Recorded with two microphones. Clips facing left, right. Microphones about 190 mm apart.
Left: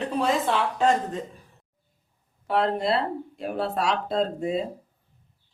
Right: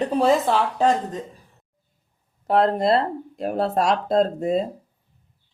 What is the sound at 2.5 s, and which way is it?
Speech, 45° right (ahead or behind).